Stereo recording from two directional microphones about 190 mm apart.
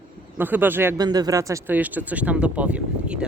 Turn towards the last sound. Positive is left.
turn(degrees=-5)  # may be behind; listen again after turning